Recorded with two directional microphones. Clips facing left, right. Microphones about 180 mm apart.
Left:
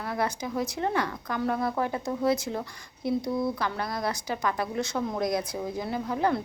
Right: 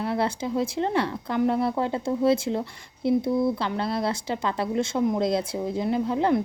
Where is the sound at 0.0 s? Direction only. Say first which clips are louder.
Right 4 dB; 25° right (ahead or behind).